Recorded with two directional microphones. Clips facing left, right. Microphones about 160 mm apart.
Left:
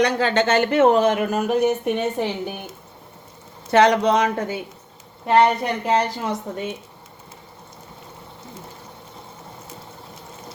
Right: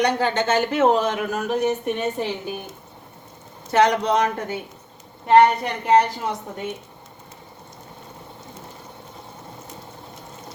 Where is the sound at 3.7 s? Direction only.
85° left.